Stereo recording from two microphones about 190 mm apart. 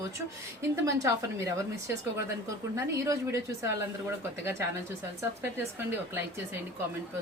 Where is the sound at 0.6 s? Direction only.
15° right (ahead or behind).